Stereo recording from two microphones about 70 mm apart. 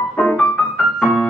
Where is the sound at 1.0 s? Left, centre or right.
Centre.